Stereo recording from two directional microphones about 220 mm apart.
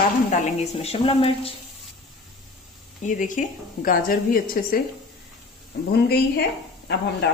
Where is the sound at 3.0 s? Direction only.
35° left (ahead or behind).